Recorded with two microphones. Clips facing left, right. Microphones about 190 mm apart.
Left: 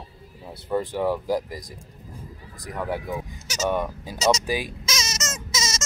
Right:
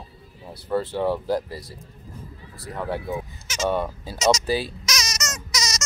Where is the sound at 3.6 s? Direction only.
15° left (ahead or behind).